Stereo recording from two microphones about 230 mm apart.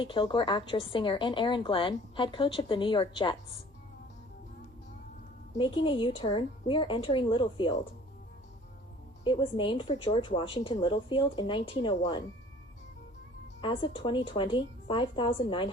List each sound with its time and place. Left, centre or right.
0.0 s speech: left
5.5 s speech: left
9.2 s speech: left
13.6 s speech: left